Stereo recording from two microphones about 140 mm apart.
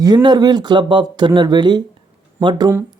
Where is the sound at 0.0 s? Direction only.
30° right (ahead or behind).